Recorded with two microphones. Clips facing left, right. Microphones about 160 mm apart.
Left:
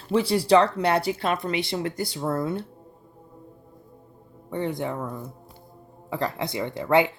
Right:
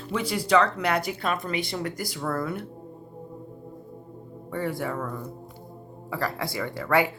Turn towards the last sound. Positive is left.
turn(degrees=20)  # may be behind; listen again after turning